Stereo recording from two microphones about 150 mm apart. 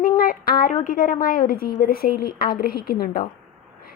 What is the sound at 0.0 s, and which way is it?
A woman's voice, 70° left (ahead or behind).